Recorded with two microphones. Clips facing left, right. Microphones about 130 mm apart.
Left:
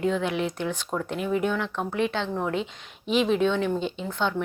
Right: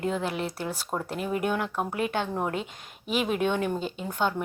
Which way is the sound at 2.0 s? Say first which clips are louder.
Left 3 dB; 50° right (ahead or behind).